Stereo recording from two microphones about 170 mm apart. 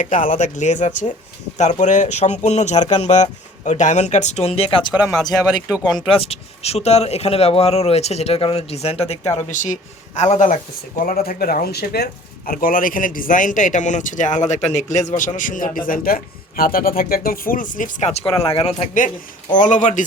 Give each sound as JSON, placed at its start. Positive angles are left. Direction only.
{"t": 0.0, "sound": "speech", "side_deg": 50}
{"t": 5.6, "sound": "speech", "side_deg": -5}
{"t": 6.0, "sound": "speech", "side_deg": 35}
{"t": 9.5, "sound": "speech", "side_deg": 45}
{"t": 11.0, "sound": "speech", "side_deg": 55}
{"t": 12.5, "sound": "speech", "side_deg": 60}
{"t": 19.5, "sound": "speech", "side_deg": 45}